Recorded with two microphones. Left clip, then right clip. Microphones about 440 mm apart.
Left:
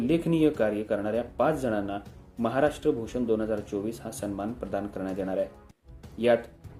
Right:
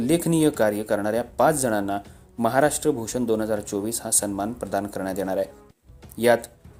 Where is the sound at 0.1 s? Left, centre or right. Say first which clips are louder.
Right 4 dB; centre.